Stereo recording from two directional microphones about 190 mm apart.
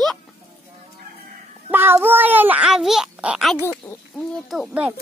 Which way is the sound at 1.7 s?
10° right (ahead or behind).